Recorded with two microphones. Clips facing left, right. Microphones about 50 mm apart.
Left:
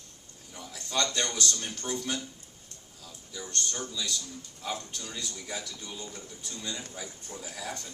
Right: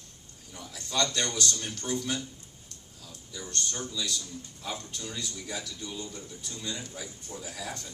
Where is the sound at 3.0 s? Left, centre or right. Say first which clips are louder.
Even; centre.